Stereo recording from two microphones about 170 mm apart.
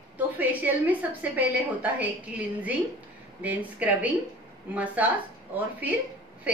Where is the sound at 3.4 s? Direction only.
10° right (ahead or behind).